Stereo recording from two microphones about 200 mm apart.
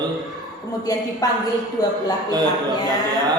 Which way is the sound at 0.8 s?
20° left (ahead or behind).